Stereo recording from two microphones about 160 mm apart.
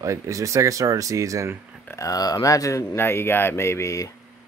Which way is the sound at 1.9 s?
20° left (ahead or behind).